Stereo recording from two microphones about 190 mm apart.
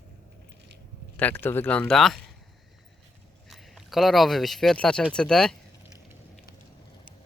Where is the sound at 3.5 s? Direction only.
Centre (ahead or behind).